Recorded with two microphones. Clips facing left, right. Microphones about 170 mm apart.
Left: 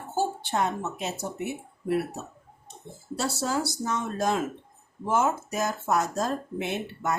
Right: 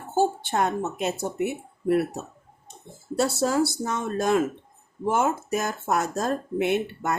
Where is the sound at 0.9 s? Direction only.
55° right (ahead or behind).